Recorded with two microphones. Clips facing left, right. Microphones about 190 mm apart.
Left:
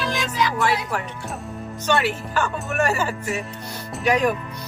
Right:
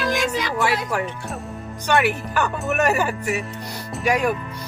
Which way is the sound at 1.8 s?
15° right (ahead or behind).